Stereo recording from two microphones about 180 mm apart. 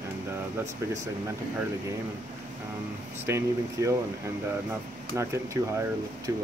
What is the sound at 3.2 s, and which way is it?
Speech, 15° right (ahead or behind).